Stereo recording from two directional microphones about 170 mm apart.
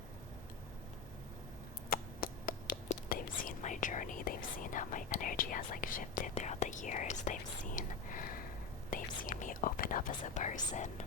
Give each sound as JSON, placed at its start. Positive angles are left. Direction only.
{"t": 1.9, "sound": "whispering", "side_deg": 55}
{"t": 8.9, "sound": "speech", "side_deg": 50}